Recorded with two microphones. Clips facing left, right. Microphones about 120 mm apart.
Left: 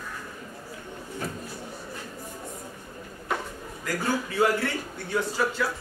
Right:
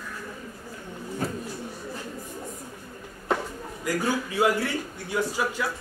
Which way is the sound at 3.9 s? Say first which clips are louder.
Right 1 dB; 15° right (ahead or behind).